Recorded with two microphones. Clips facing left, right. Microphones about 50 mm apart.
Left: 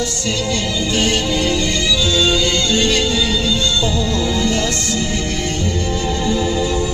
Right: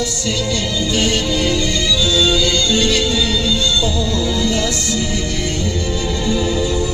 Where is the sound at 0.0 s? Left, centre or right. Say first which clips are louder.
Even; left.